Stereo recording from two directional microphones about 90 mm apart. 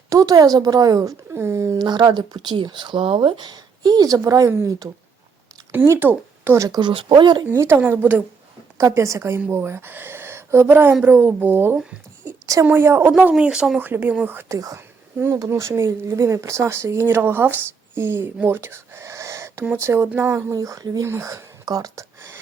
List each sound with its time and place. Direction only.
0.1 s a woman's voice: 40° right (ahead or behind)
1.8 s a woman's voice: 50° right (ahead or behind); by 6.6 s 20° right (ahead or behind)
6.6 s speech: 50° right (ahead or behind)
6.9 s speech: 75° right (ahead or behind)
7.5 s speech: 30° right (ahead or behind)
7.8 s speech: 20° right (ahead or behind)
8.8 s a woman's voice: 35° right (ahead or behind)
13.1 s speech: 10° right (ahead or behind)
13.7 s speech: 20° right (ahead or behind)
14.5 s a woman's voice: 40° right (ahead or behind)
14.8 s a sound: 30° right (ahead or behind)
15.4 s speech: 30° right (ahead or behind)
20.5 s a woman's voice: 40° right (ahead or behind)
21.0 s speech: 35° right (ahead or behind)